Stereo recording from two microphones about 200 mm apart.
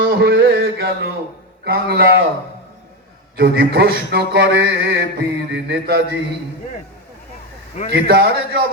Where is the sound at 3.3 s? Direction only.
50° right (ahead or behind).